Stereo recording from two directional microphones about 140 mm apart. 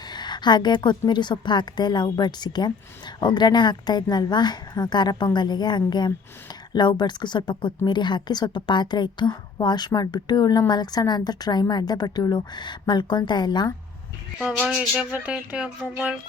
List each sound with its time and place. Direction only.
0.1 s a woman's voice: 30° left (ahead or behind)
14.4 s speech: 5° right (ahead or behind)